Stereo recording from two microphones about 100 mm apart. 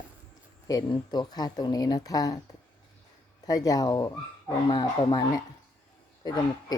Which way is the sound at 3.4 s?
40° left (ahead or behind).